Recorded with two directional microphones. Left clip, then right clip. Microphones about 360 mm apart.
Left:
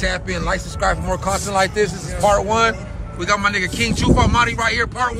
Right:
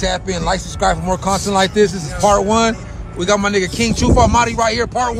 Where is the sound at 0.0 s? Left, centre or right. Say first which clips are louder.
Right 3 dB; centre.